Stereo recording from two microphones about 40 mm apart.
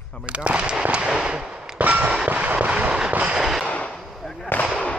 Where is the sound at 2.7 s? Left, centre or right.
Right.